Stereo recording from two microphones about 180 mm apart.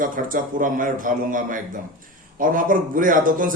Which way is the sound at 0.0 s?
50° right (ahead or behind).